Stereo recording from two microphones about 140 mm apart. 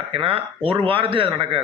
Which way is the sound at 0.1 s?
45° right (ahead or behind).